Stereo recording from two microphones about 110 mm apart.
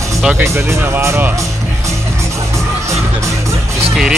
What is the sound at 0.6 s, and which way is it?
Speech, 25° right (ahead or behind).